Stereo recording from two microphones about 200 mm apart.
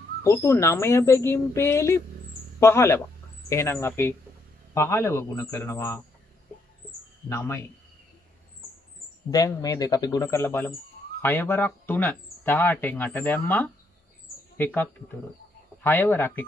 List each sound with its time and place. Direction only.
0.2 s speech: 15° left (ahead or behind)
7.2 s speech: 15° left (ahead or behind)
9.3 s speech: 15° left (ahead or behind)